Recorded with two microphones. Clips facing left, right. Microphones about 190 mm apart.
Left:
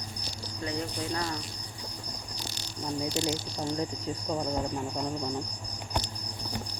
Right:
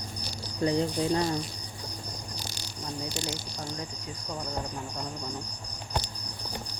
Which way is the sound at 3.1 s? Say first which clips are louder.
Left 5 dB; 20° left (ahead or behind).